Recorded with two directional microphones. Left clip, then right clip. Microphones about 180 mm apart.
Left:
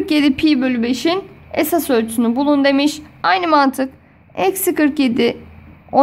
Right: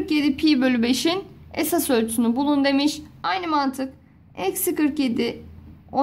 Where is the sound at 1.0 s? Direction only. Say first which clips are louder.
Left 5 dB; 15° left (ahead or behind).